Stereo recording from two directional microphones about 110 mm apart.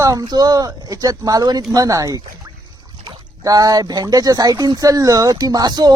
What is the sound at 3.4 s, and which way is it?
Speech, 35° right (ahead or behind).